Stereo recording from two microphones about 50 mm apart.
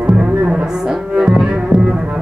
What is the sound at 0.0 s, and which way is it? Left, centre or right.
Music, right.